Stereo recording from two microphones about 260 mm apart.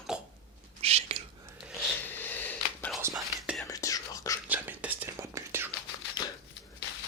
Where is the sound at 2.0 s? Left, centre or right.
Centre.